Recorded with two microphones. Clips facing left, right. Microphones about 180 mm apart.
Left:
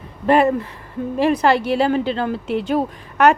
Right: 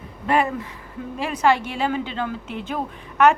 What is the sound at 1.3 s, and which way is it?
A woman's voice, 35° left (ahead or behind).